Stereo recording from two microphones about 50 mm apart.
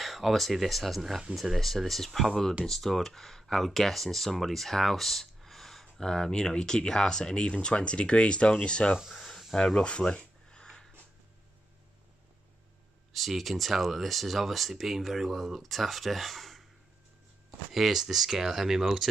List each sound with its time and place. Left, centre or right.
0.0 s speech: centre
9.1 s snake: centre
9.8 s a sound: centre
13.1 s speech: centre
17.7 s speech: centre